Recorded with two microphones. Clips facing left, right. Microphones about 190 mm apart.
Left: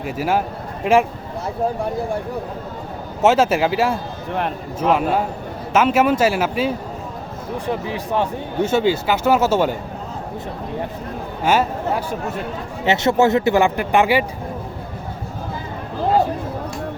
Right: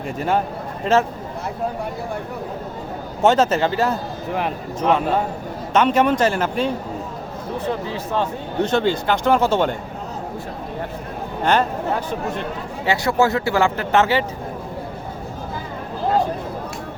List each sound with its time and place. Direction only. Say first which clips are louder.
0.2 s speech: even; 5° left (ahead or behind)
3.2 s speech: left 1 dB; 5° left (ahead or behind)
4.3 s speech: left 1 dB; centre (ahead or behind)
11.4 s speech: left 1 dB; 5° left (ahead or behind)
12.8 s speech: left 3 dB; 20° left (ahead or behind)